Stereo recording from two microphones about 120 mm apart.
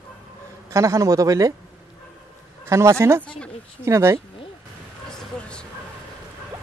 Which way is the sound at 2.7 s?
25° right (ahead or behind).